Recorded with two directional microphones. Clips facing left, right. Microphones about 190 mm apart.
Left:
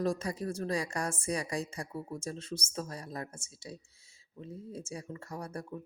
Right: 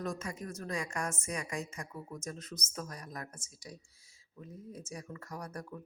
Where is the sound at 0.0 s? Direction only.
35° left (ahead or behind).